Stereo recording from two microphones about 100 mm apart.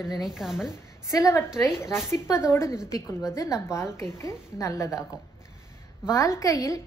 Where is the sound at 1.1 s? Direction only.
35° left (ahead or behind).